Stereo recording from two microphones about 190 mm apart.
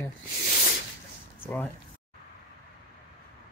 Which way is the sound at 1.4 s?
10° left (ahead or behind).